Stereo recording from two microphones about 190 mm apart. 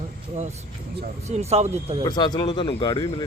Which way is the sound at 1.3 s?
35° right (ahead or behind).